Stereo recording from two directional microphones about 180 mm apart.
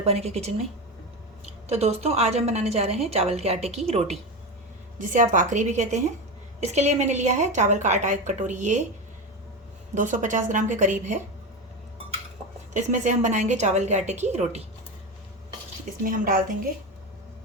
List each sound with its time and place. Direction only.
0.0 s a woman's voice: 35° right (ahead or behind)
1.7 s a woman's voice: 35° right (ahead or behind)
4.9 s a woman's voice: 45° right (ahead or behind)
9.9 s a woman's voice: 45° right (ahead or behind)
12.7 s a woman's voice: 40° right (ahead or behind)
16.0 s a woman's voice: 50° right (ahead or behind)